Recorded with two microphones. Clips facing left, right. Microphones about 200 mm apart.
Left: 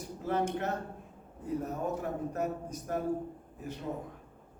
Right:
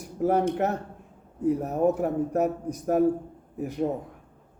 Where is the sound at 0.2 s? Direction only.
65° right (ahead or behind).